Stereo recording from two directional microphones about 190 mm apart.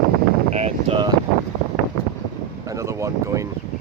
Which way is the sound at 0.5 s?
30° right (ahead or behind).